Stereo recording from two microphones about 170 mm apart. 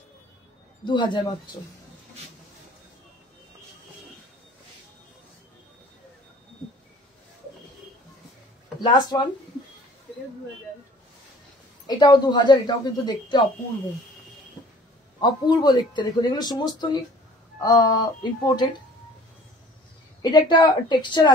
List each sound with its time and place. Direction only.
0.8 s speech: 25° left (ahead or behind)
8.8 s speech: 25° left (ahead or behind)
11.9 s speech: 25° left (ahead or behind)
15.1 s speech: 25° left (ahead or behind)
20.2 s speech: 25° left (ahead or behind)